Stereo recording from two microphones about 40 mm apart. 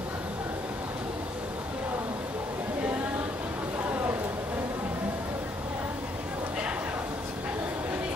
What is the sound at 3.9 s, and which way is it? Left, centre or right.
Vehicle, right.